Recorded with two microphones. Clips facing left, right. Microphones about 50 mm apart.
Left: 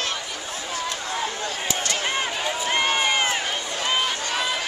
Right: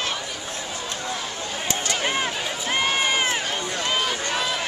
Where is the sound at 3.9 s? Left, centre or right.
Centre.